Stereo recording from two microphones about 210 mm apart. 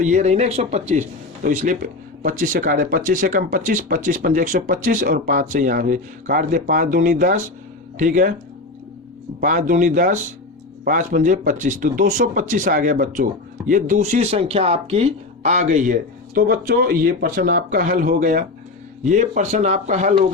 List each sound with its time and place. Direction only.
0.0 s speech: 35° right (ahead or behind)
9.4 s speech: 40° right (ahead or behind)